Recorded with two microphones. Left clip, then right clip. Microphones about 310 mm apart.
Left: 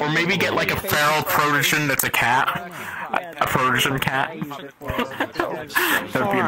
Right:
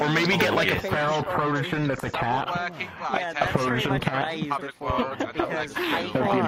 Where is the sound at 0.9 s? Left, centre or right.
Left.